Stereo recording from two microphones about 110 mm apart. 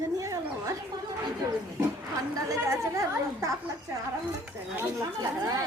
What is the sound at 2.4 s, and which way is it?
Chatter, 30° right (ahead or behind).